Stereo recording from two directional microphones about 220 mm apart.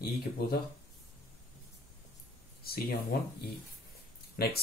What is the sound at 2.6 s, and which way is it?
Speech, 45° left (ahead or behind).